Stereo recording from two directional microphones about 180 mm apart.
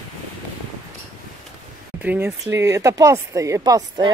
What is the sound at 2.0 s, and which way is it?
Speech, 10° right (ahead or behind).